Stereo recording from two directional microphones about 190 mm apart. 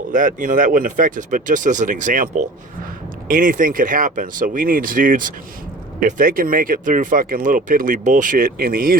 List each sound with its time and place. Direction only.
0.1 s speech: 45° right (ahead or behind)